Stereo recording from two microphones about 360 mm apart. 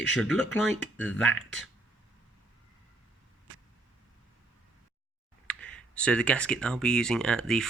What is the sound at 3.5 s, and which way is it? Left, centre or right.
Vehicle, right.